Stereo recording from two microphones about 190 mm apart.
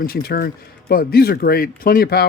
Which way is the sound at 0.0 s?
55° left (ahead or behind).